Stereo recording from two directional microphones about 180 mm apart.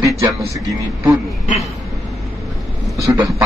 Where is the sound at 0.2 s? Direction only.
15° right (ahead or behind).